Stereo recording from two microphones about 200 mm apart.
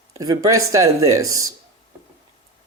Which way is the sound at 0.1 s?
15° right (ahead or behind).